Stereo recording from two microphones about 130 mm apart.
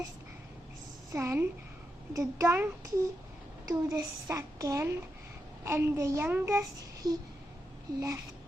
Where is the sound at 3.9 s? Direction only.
25° right (ahead or behind).